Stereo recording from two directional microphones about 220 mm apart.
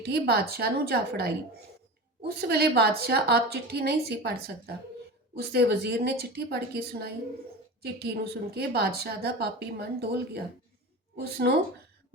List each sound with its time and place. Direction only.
0.0 s speech: 45° right (ahead or behind)